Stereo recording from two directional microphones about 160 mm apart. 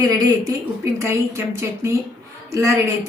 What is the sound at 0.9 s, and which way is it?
Speech, 20° right (ahead or behind).